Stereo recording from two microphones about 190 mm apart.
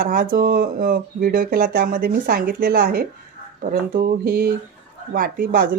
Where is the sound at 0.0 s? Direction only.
50° right (ahead or behind).